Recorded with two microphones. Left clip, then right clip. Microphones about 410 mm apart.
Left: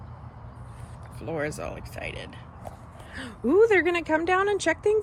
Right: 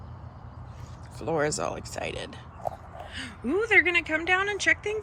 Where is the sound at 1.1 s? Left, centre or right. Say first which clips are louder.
Right 4 dB; centre.